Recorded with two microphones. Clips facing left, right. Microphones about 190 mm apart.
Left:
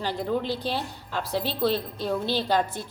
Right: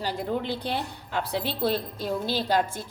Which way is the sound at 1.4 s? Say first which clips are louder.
Left 1 dB; 50° right (ahead or behind).